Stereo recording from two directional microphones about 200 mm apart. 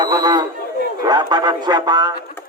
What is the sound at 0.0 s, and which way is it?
Chatter, 20° right (ahead or behind).